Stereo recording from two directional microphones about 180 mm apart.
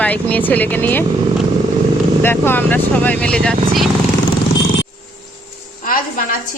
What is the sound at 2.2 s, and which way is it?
Speech, 10° left (ahead or behind).